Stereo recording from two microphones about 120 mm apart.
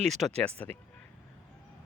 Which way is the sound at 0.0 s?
5° left (ahead or behind).